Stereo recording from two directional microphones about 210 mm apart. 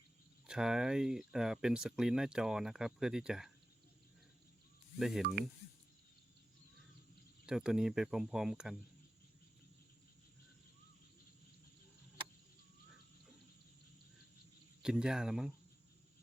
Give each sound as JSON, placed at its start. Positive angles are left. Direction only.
{"t": 0.4, "sound": "speech", "side_deg": -5}
{"t": 4.9, "sound": "speech", "side_deg": 0}
{"t": 5.2, "sound": "speech", "side_deg": -45}
{"t": 7.4, "sound": "speech", "side_deg": -5}
{"t": 14.8, "sound": "speech", "side_deg": -5}